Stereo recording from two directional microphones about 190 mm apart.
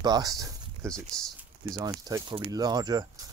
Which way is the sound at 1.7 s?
20° right (ahead or behind).